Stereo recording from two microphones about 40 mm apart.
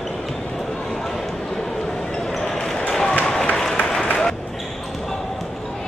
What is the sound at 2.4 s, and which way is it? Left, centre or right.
Basketball bounce, centre.